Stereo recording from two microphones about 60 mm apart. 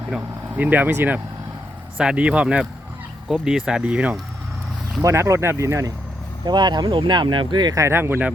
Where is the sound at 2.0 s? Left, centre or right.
Centre.